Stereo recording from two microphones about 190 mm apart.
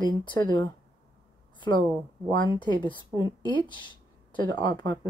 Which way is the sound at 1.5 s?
25° left (ahead or behind).